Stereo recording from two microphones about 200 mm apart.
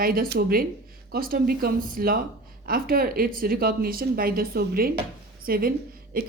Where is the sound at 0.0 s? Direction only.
45° right (ahead or behind).